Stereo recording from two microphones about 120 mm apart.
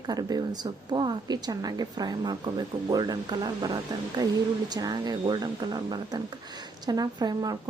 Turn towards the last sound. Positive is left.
turn(degrees=-35)  # may be behind; listen again after turning